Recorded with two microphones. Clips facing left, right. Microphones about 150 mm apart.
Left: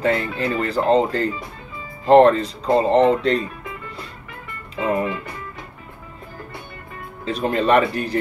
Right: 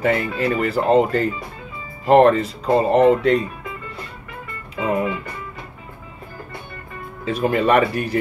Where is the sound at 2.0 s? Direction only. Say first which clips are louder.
Left 1 dB; 25° left (ahead or behind).